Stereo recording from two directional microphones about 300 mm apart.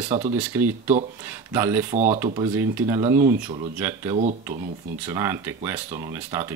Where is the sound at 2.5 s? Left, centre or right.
Centre.